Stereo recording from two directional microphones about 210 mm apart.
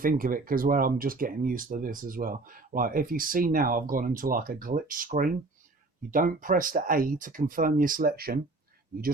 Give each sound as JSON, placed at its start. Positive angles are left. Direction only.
{"t": 0.0, "sound": "speech", "side_deg": -40}